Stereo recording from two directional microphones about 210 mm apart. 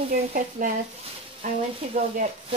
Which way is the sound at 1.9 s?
30° right (ahead or behind).